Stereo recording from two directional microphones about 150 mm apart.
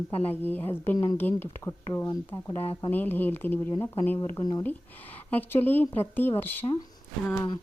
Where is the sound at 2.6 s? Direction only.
35° left (ahead or behind).